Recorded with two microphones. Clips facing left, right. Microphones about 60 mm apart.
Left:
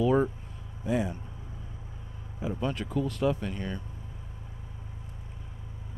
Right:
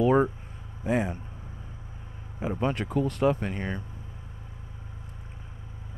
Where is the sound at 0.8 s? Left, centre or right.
Right.